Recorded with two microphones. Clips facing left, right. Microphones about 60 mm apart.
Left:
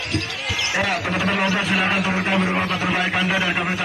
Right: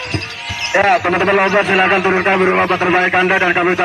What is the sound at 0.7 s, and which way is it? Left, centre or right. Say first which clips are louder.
A man's voice: right 12 dB; right.